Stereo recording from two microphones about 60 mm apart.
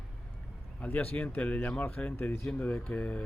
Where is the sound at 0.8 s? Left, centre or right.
Left.